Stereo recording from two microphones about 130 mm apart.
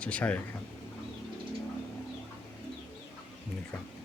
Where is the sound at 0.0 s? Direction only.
10° left (ahead or behind).